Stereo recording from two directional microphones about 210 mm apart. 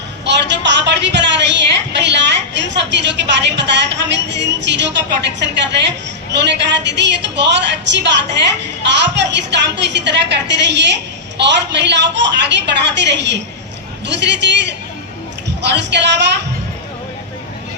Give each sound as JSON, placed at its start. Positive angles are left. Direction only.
{"t": 0.3, "sound": "speech", "side_deg": -55}